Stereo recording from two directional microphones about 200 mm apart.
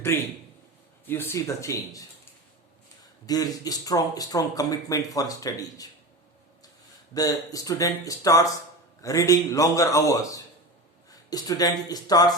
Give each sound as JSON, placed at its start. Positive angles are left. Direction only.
{"t": 0.1, "sound": "speech", "side_deg": 15}
{"t": 3.2, "sound": "speech", "side_deg": 20}
{"t": 7.1, "sound": "speech", "side_deg": 15}